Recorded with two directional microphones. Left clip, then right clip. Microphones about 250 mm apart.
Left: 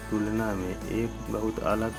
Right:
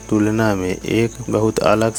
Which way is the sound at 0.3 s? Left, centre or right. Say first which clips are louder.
Right 12 dB; right.